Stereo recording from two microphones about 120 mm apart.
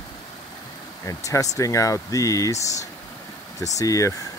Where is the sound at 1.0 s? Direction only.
25° left (ahead or behind).